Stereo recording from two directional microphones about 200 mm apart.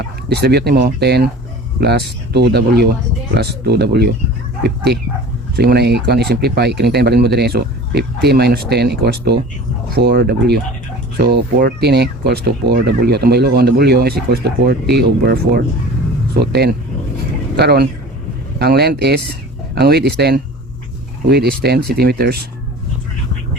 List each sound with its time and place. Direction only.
0.3 s speech: 55° right (ahead or behind)